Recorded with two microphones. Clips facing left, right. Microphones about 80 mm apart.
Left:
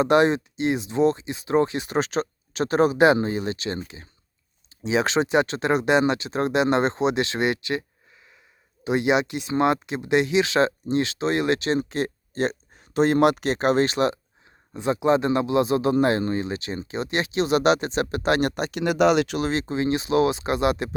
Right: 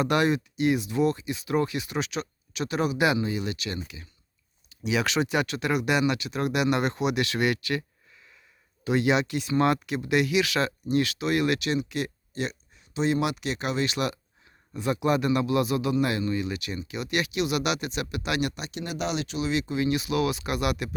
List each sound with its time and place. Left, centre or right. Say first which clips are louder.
0.0 s speech: left 5 dB; left
18.8 s speech: left 11 dB; left
19.4 s speech: left 2 dB; left